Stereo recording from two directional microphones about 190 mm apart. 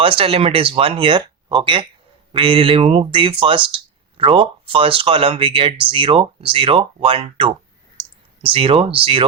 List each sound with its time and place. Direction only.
0.0 s speech: 30° right (ahead or behind)